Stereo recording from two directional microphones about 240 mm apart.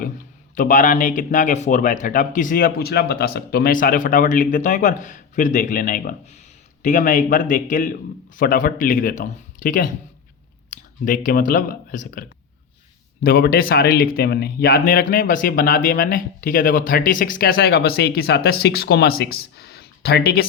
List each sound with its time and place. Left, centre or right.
0.5 s speech: left
13.2 s speech: left